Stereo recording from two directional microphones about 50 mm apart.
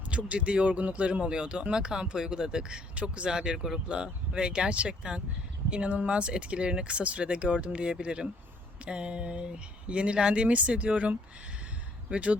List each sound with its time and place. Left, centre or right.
0.3 s speech: right